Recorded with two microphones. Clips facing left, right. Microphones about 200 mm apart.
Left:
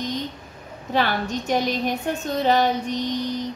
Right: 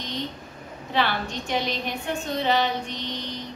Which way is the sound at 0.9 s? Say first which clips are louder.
Left 3 dB; 45° left (ahead or behind).